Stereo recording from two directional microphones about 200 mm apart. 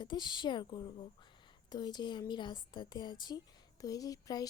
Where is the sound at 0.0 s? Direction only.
20° left (ahead or behind).